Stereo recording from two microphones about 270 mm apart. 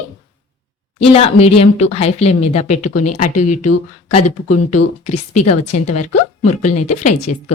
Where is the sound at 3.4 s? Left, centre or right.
Left.